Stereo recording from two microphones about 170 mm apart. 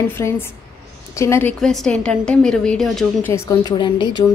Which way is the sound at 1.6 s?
Centre (ahead or behind).